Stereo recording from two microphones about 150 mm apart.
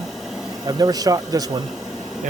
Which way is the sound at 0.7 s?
25° right (ahead or behind).